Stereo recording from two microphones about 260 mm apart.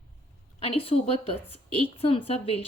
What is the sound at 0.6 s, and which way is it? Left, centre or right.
Speech, left.